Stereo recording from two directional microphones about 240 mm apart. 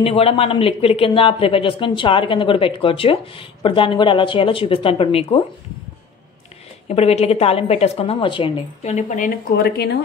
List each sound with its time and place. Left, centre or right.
0.0 s speech: left
6.9 s speech: left